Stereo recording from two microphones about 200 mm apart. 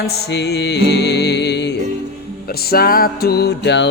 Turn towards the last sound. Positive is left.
turn(degrees=55)  # may be behind; listen again after turning